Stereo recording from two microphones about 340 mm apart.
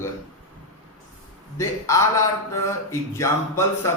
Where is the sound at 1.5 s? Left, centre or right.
Centre.